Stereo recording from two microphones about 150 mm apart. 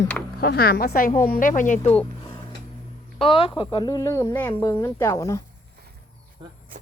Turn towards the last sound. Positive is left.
turn(degrees=-35)  # may be behind; listen again after turning